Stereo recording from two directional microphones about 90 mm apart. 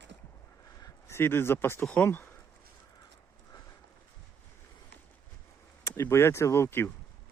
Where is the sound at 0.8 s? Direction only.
30° left (ahead or behind).